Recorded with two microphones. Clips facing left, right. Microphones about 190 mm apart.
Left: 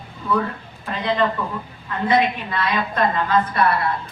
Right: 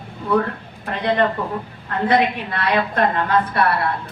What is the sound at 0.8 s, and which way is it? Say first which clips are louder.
A woman's voice: right 2 dB; 60° right (ahead or behind).